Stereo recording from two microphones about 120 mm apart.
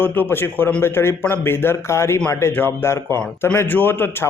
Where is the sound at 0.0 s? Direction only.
15° left (ahead or behind).